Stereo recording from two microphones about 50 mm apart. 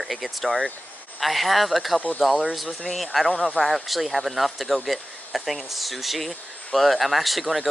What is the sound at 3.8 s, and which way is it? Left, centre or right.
Speech, centre.